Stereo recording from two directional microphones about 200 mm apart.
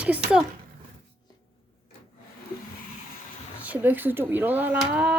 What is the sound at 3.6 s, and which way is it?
Speech, 10° right (ahead or behind).